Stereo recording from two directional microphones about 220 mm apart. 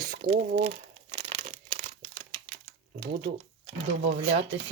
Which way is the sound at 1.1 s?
25° right (ahead or behind).